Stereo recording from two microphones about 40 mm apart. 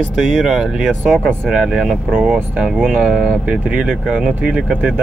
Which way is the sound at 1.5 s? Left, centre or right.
Centre.